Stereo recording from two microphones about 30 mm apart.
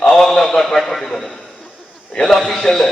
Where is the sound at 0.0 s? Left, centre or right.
Left.